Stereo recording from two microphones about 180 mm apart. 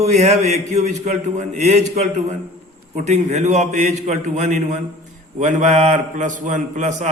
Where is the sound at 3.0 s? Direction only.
40° right (ahead or behind).